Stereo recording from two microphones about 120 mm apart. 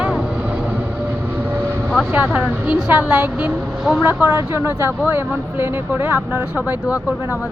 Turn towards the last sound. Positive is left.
turn(degrees=-10)  # may be behind; listen again after turning